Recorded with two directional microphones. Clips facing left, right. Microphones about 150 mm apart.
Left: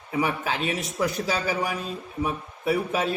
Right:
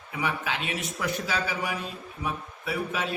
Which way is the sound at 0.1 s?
40° left (ahead or behind).